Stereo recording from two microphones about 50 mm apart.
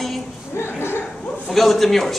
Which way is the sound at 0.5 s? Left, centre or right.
Left.